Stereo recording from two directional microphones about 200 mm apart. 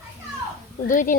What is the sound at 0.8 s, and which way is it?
Speech, 40° left (ahead or behind).